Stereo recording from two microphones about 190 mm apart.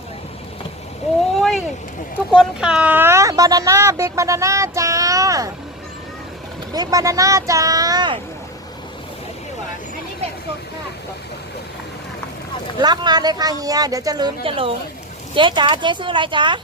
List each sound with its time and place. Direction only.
1.4 s boat: centre (ahead or behind)
2.3 s speech: centre (ahead or behind); by 5.5 s 15° right (ahead or behind)
6.7 s speech: 20° right (ahead or behind)
12.8 s speech: 20° right (ahead or behind)